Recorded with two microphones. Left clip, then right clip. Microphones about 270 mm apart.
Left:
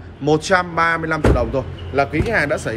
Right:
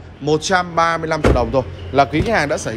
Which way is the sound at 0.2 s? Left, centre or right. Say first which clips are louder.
Even; centre.